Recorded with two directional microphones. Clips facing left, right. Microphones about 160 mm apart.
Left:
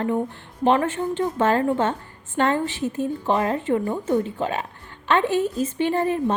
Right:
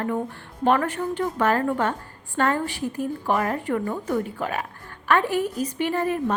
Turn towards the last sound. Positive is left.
turn(degrees=30)  # may be behind; listen again after turning